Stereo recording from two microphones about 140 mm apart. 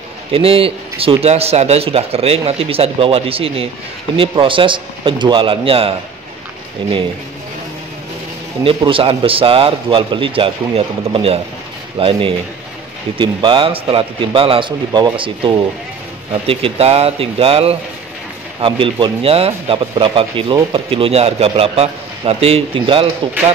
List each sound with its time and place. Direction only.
0.3 s a man's voice: 40° right (ahead or behind)
8.6 s a man's voice: 40° right (ahead or behind)